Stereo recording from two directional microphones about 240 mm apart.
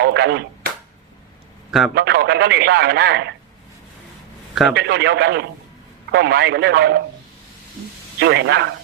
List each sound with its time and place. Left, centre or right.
0.0 s a sound: right
2.0 s speech: right
4.7 s speech: right
8.2 s speech: right